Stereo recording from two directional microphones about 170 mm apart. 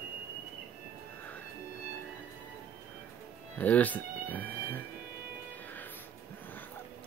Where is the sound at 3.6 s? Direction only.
10° left (ahead or behind).